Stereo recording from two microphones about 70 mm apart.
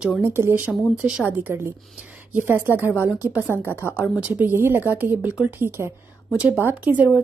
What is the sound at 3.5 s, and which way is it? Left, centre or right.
Speech, left.